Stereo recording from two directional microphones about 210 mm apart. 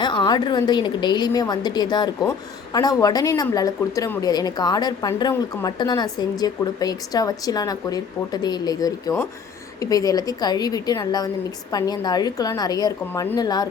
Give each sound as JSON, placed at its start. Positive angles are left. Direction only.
{"t": 0.0, "sound": "a woman's voice", "side_deg": 20}